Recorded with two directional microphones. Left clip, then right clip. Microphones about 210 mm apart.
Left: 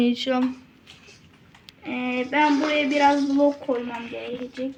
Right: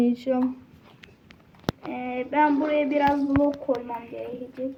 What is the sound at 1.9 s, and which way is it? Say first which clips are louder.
Speech: left 4 dB; 35° left (ahead or behind).